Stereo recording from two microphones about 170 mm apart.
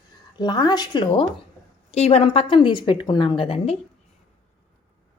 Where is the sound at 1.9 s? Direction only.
40° left (ahead or behind).